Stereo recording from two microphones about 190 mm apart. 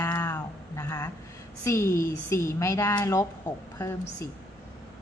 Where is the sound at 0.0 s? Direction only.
10° left (ahead or behind).